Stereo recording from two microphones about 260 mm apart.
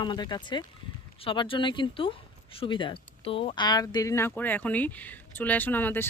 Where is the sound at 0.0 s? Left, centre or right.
Centre.